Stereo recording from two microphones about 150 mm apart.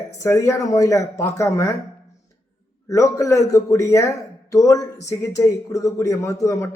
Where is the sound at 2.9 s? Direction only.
20° left (ahead or behind).